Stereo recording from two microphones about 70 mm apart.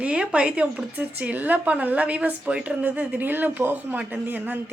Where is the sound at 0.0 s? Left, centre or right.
Centre.